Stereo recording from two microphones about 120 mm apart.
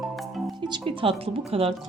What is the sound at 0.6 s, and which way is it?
Speech, 40° right (ahead or behind).